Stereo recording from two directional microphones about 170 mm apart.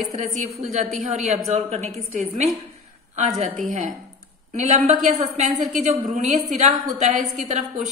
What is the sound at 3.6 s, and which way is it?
A woman's voice, 45° right (ahead or behind).